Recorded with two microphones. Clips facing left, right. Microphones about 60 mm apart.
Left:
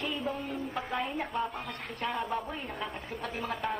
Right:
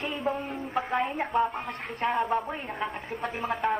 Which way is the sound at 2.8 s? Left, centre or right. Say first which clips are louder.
Right 5 dB; right.